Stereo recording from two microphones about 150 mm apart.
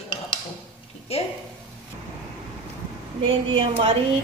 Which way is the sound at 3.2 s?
35° right (ahead or behind).